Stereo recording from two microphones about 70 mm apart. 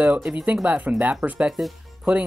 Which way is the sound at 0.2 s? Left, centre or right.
Centre.